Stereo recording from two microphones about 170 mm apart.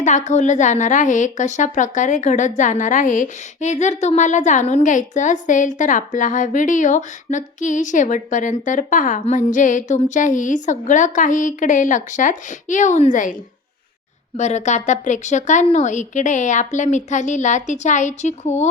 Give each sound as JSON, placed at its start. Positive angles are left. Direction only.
{"t": 0.0, "sound": "a woman's voice", "side_deg": 45}
{"t": 14.3, "sound": "a woman's voice", "side_deg": 40}